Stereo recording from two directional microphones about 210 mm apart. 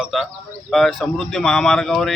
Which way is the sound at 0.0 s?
Centre (ahead or behind).